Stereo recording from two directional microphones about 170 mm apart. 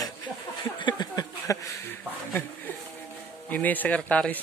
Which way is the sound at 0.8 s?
25° left (ahead or behind).